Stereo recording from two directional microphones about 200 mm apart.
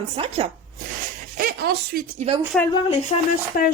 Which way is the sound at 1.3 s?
50° right (ahead or behind).